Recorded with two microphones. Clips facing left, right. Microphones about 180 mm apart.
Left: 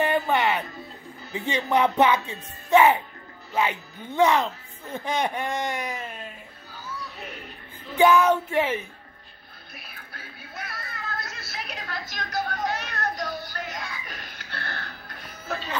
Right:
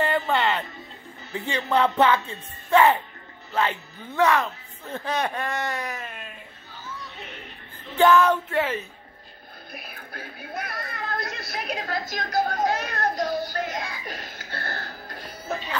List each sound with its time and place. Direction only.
0.0 s music: 15° left (ahead or behind)
1.3 s speech: 15° left (ahead or behind)
8.0 s speech: 15° left (ahead or behind)
9.8 s television: 45° right (ahead or behind)